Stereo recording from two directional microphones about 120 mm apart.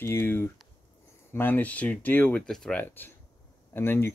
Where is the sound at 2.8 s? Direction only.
15° left (ahead or behind).